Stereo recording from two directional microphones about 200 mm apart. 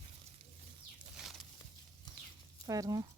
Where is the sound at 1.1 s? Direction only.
Centre (ahead or behind).